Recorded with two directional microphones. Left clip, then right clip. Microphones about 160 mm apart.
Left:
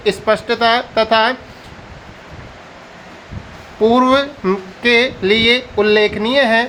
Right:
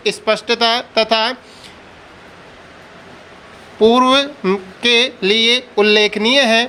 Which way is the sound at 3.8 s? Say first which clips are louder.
Right 1 dB; 25° right (ahead or behind).